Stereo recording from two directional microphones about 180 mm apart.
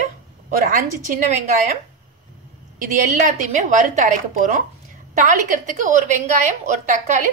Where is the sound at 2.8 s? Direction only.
45° right (ahead or behind).